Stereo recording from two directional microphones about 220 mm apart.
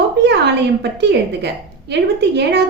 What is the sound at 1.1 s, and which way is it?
Speech, 50° right (ahead or behind).